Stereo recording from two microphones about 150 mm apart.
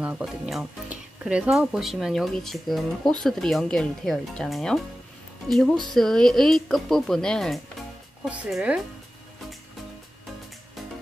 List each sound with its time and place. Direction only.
0.0 s speech: 5° right (ahead or behind)